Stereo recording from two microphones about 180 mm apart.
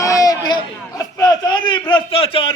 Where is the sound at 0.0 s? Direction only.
20° left (ahead or behind).